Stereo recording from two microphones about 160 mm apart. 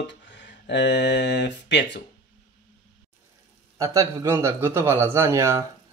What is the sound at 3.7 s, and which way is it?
A man's voice, 20° right (ahead or behind).